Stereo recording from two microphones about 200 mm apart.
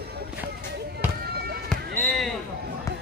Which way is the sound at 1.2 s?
50° right (ahead or behind).